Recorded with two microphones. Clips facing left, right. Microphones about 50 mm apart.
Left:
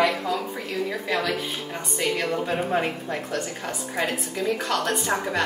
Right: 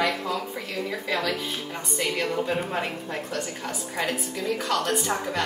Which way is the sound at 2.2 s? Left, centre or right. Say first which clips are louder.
Left 1 dB; centre.